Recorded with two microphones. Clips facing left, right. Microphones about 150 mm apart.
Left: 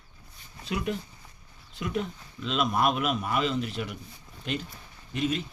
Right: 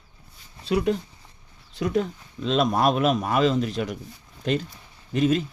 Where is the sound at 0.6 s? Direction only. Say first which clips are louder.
Right 8 dB; 30° right (ahead or behind).